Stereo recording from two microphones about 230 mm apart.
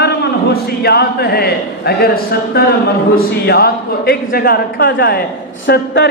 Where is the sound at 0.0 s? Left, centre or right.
Left.